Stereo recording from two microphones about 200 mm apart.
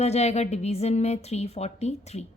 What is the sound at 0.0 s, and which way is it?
Speech, 35° left (ahead or behind).